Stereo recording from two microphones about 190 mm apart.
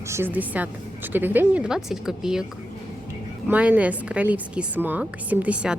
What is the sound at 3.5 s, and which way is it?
A woman's voice, 10° right (ahead or behind).